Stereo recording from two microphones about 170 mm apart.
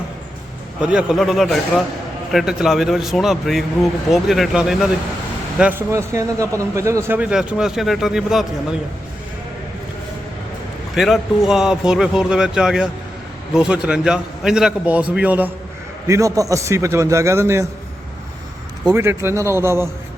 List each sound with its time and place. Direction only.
0.8 s a man's voice: 5° right (ahead or behind)
10.9 s a man's voice: centre (ahead or behind)
18.9 s a man's voice: 15° right (ahead or behind)